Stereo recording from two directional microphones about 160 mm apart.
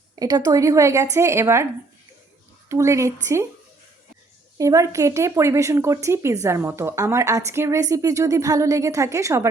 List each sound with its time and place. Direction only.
0.2 s a woman's voice: 25° right (ahead or behind)
2.6 s speech: 20° right (ahead or behind)
4.5 s a woman's voice: 20° right (ahead or behind)